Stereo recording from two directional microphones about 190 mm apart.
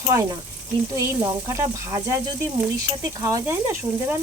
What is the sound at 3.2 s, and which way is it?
Speech, 15° right (ahead or behind).